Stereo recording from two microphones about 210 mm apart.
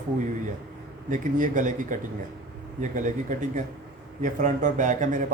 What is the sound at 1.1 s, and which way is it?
A man's voice, 40° right (ahead or behind).